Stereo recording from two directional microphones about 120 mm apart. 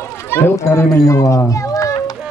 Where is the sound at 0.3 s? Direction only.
20° left (ahead or behind).